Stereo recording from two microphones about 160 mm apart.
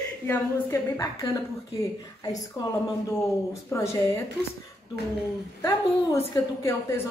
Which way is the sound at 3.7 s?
20° left (ahead or behind).